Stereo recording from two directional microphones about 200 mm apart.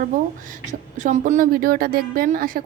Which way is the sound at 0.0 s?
40° right (ahead or behind).